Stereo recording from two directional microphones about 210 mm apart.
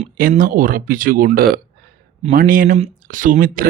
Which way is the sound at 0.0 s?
40° right (ahead or behind).